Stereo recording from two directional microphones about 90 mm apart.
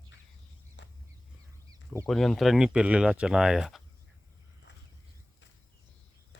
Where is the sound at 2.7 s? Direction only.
15° right (ahead or behind).